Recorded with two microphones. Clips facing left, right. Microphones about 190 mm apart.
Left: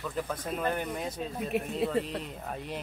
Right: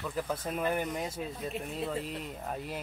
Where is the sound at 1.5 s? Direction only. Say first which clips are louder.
Left 12 dB; 70° left (ahead or behind).